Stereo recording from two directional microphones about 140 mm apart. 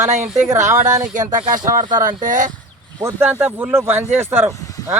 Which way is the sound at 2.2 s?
70° right (ahead or behind).